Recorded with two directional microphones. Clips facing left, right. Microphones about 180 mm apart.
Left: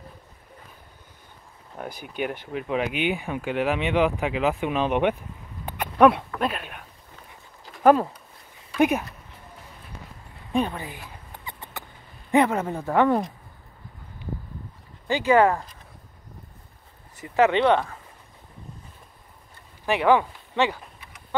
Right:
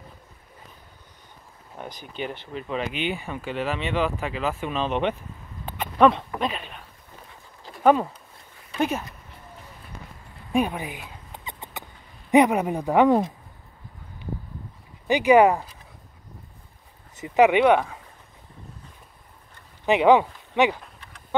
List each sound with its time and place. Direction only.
1.8 s speech: 10° left (ahead or behind)
5.7 s dog: 10° left (ahead or behind)
6.4 s speech: 10° left (ahead or behind)
7.8 s speech: 5° left (ahead or behind)
10.5 s rodents: 10° right (ahead or behind)
12.3 s speech: 15° right (ahead or behind)
15.0 s speech: 15° right (ahead or behind)
17.1 s speech: 20° right (ahead or behind)
19.9 s speech: 20° right (ahead or behind)